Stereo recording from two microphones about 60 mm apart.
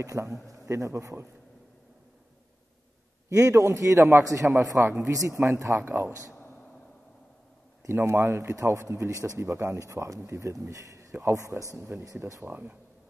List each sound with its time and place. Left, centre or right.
0.0 s speech: right
3.3 s speech: right
5.3 s speech: right
7.9 s speech: right
12.2 s speech: right